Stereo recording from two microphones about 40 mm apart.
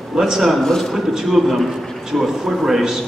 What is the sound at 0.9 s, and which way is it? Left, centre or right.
A man's voice, centre.